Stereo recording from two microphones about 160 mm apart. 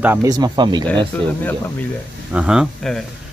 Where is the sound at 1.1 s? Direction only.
10° left (ahead or behind).